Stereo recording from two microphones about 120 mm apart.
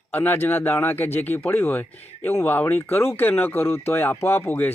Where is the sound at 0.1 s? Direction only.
15° left (ahead or behind).